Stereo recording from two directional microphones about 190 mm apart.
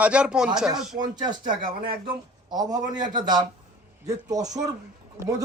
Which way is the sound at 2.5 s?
20° right (ahead or behind).